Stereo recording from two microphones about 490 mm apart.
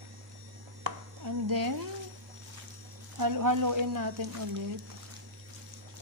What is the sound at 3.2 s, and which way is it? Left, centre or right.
A woman's voice, right.